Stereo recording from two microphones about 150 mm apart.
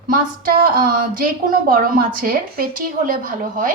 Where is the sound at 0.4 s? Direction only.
75° right (ahead or behind).